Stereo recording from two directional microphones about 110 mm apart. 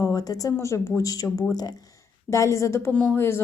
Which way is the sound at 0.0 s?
35° left (ahead or behind).